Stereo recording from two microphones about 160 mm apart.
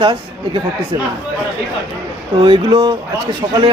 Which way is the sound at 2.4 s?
30° right (ahead or behind).